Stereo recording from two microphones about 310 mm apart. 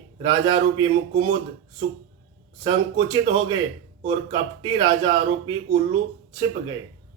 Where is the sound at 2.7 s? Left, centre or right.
Centre.